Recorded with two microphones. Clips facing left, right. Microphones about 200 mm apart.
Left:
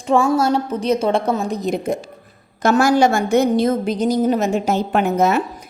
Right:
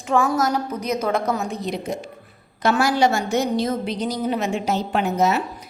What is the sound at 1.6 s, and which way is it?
A woman's voice, 45° left (ahead or behind).